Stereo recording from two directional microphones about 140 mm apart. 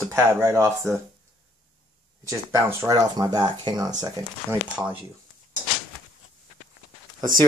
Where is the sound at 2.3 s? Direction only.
20° right (ahead or behind).